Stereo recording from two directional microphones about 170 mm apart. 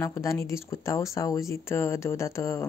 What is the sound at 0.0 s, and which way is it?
Speech, 15° left (ahead or behind).